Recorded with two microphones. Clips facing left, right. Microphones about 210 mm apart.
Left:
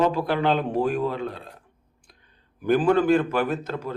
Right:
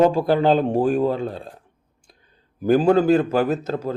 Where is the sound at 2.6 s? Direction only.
40° right (ahead or behind).